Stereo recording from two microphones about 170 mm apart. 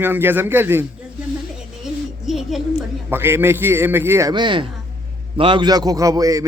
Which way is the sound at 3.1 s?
15° right (ahead or behind).